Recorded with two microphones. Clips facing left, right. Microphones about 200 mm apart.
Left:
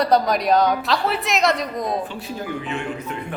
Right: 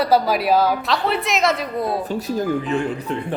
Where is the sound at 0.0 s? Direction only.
5° right (ahead or behind).